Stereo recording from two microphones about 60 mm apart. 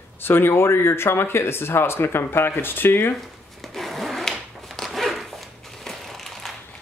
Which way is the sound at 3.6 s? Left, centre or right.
Centre.